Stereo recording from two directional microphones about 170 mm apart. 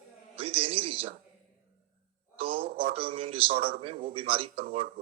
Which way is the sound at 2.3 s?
35° right (ahead or behind).